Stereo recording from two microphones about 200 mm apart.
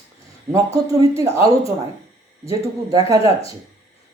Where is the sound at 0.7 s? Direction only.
15° right (ahead or behind).